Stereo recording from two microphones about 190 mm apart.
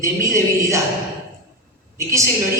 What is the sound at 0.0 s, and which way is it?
Speech, 15° right (ahead or behind).